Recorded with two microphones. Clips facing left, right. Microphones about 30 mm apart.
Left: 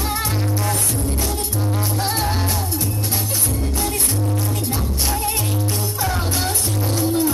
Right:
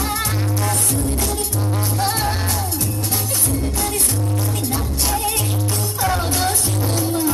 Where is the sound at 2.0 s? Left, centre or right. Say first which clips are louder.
Right 3 dB; centre.